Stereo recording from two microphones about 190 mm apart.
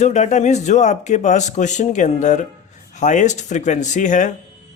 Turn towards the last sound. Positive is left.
turn(degrees=40)  # may be behind; listen again after turning